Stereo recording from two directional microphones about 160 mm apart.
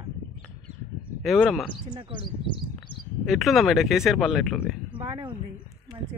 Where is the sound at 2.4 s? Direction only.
30° left (ahead or behind).